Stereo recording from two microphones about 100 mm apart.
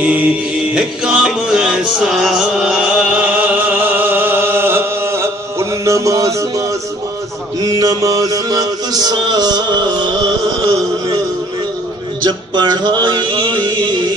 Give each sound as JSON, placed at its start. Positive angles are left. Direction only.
{"t": 0.0, "sound": "music", "side_deg": -15}
{"t": 7.6, "sound": "mantra", "side_deg": -40}
{"t": 12.3, "sound": "music", "side_deg": -45}